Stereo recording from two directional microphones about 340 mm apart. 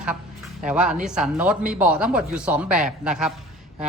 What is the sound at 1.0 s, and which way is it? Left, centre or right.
A man's voice, centre.